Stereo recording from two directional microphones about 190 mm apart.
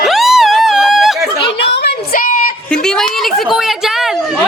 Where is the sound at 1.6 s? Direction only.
60° left (ahead or behind); by 2.5 s 45° left (ahead or behind).